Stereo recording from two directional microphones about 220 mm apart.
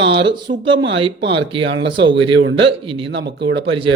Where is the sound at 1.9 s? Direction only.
25° right (ahead or behind).